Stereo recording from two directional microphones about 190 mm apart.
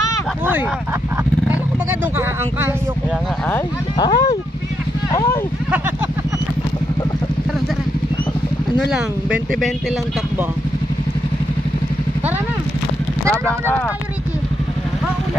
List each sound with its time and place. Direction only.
4.0 s speech: 20° left (ahead or behind)
5.1 s a sound: 15° left (ahead or behind)
8.7 s speech: 5° right (ahead or behind)
13.5 s speech: 5° left (ahead or behind)